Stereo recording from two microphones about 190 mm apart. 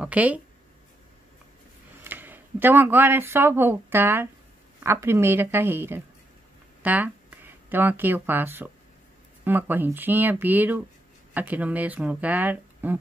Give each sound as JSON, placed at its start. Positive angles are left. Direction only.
{"t": 0.0, "sound": "speech", "side_deg": -10}
{"t": 2.0, "sound": "speech", "side_deg": -10}